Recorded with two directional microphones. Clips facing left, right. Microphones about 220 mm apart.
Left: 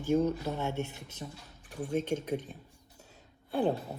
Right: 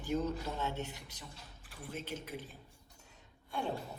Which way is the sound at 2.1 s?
45° left (ahead or behind).